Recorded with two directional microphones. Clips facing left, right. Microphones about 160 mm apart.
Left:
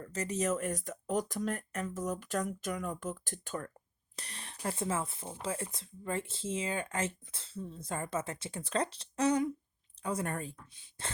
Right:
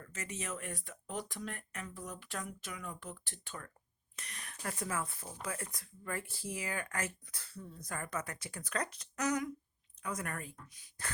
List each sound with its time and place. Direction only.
0.0 s speech: 35° left (ahead or behind)
4.1 s speech: 30° left (ahead or behind)